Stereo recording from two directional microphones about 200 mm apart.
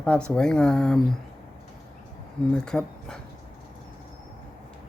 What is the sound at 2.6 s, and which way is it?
Speech, 5° left (ahead or behind).